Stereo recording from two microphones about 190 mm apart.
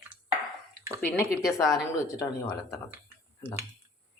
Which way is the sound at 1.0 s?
10° left (ahead or behind).